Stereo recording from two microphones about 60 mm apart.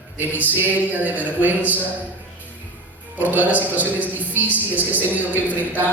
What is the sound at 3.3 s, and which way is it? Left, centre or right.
A man's voice, right.